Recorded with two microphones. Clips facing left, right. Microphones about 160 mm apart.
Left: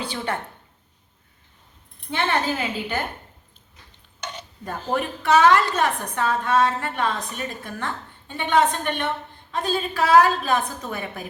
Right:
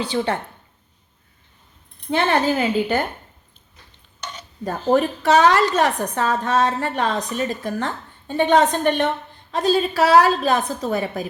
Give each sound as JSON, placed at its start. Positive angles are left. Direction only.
{"t": 2.0, "sound": "a woman's voice", "side_deg": -40}
{"t": 4.6, "sound": "a woman's voice", "side_deg": -40}